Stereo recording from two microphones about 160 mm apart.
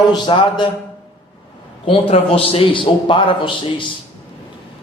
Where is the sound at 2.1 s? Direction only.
35° left (ahead or behind).